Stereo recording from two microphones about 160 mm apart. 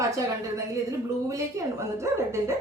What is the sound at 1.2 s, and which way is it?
Speech, 20° right (ahead or behind).